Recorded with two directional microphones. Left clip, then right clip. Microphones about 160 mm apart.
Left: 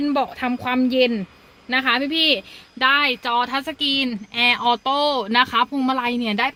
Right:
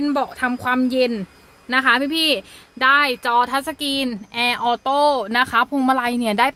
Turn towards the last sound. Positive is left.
turn(degrees=-20)  # may be behind; listen again after turning